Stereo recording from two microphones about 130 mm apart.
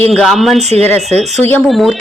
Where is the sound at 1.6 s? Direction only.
Centre (ahead or behind).